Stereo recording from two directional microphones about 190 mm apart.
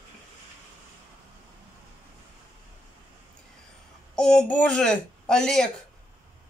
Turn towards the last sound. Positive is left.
turn(degrees=5)  # may be behind; listen again after turning